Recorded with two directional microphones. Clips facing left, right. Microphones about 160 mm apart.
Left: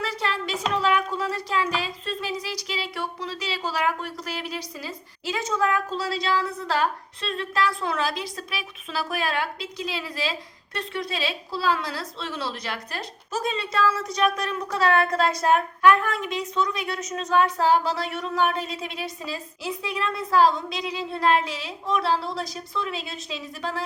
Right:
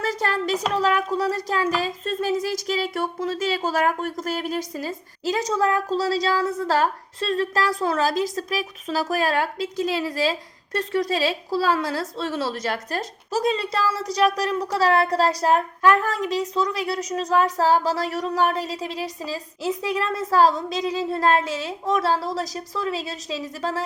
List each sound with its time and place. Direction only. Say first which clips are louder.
0.0 s speech: right 4 dB; 45° right (ahead or behind)